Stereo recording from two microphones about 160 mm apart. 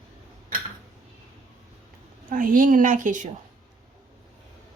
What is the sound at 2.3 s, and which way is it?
A woman's voice, 60° right (ahead or behind).